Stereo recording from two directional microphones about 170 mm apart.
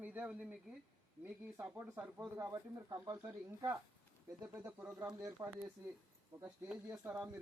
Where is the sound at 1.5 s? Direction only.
15° right (ahead or behind).